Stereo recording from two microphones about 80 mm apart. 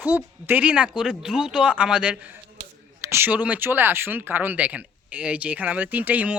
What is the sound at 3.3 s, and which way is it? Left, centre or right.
A man's voice, centre.